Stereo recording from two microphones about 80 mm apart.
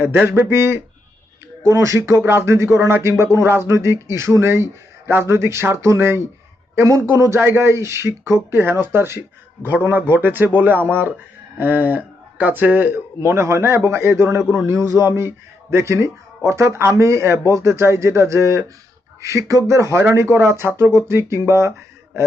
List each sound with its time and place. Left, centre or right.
0.3 s speech: right